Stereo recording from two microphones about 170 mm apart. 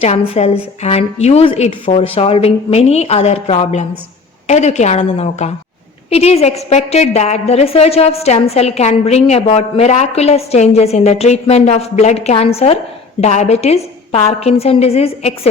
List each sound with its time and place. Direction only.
0.0 s a woman's voice: 40° left (ahead or behind)